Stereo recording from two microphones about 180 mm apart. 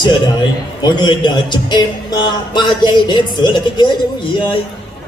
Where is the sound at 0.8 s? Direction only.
25° left (ahead or behind).